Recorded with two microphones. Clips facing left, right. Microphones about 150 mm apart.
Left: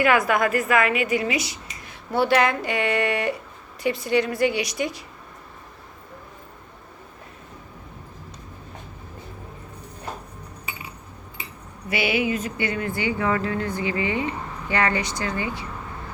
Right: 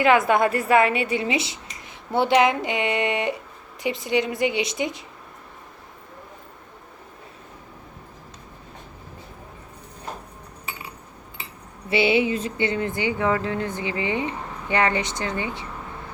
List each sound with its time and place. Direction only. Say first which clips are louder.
0.0 s speech: right 2 dB; 25° right (ahead or behind)
11.9 s speech: right 3 dB; 25° right (ahead or behind)